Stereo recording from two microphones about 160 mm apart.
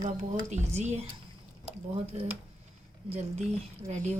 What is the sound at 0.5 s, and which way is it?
Speech, 45° right (ahead or behind).